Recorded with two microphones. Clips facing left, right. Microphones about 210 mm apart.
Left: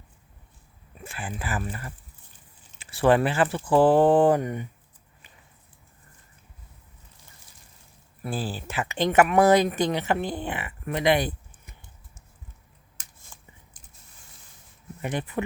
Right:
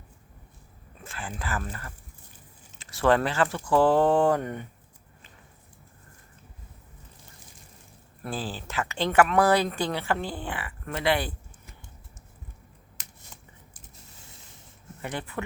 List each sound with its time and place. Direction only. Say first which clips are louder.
1.0 s speech: left 2 dB; 15° left (ahead or behind)
3.0 s speech: left 2 dB; 15° left (ahead or behind)
8.2 s speech: left 2 dB; 15° left (ahead or behind)
15.0 s speech: left 5 dB; 20° left (ahead or behind)